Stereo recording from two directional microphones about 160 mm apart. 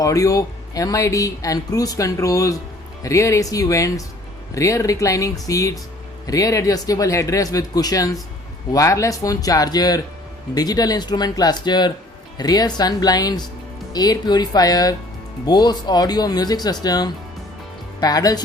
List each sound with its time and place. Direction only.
0.0 s speech: 20° left (ahead or behind)